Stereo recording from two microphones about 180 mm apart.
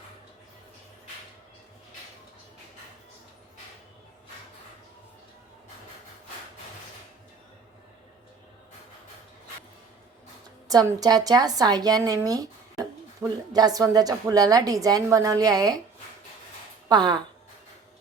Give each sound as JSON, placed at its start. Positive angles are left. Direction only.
{"t": 10.7, "sound": "a woman's voice", "side_deg": -20}
{"t": 16.9, "sound": "a woman's voice", "side_deg": -25}